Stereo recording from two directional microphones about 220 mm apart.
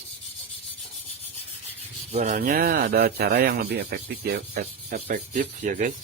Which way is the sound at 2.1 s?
35° right (ahead or behind).